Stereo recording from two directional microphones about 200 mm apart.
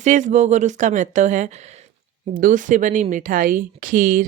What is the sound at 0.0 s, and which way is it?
Speech, 35° right (ahead or behind).